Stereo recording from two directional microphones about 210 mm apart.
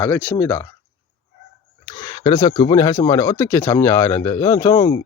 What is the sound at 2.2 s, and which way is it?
Speech, 20° left (ahead or behind).